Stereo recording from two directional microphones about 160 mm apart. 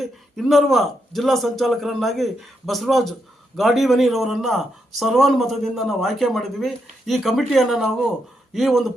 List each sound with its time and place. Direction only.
0.0 s speech: centre (ahead or behind)